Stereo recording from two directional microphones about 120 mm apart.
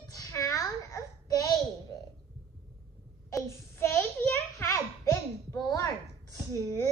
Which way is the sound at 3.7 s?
20° left (ahead or behind).